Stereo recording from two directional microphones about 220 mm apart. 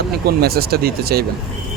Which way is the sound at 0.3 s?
45° right (ahead or behind).